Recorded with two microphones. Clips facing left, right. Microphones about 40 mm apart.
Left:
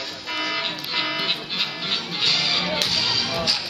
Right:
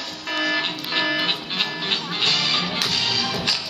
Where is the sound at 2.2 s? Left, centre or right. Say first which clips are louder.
Right 1 dB; right.